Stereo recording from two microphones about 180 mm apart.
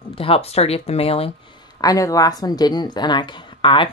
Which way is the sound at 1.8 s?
20° left (ahead or behind).